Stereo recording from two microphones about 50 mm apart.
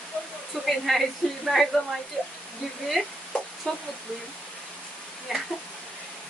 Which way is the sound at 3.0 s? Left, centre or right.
Centre.